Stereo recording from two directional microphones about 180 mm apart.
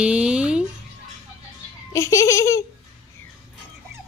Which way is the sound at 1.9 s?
15° left (ahead or behind).